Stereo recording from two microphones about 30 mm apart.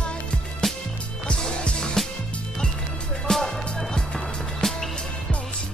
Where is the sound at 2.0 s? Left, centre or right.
Centre.